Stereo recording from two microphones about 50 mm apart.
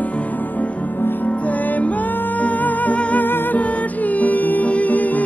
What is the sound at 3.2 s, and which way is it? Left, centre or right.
Music, left.